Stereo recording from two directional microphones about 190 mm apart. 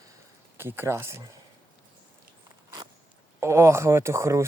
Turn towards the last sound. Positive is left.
turn(degrees=-15)  # may be behind; listen again after turning